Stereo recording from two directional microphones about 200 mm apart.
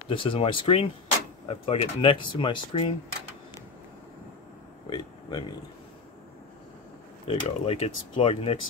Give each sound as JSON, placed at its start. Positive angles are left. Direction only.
{"t": 0.1, "sound": "speech", "side_deg": 25}
{"t": 4.8, "sound": "a sound", "side_deg": 20}
{"t": 7.2, "sound": "speech", "side_deg": 30}